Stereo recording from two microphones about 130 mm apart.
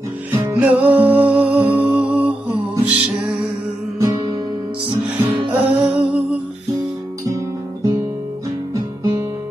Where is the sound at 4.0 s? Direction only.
30° right (ahead or behind).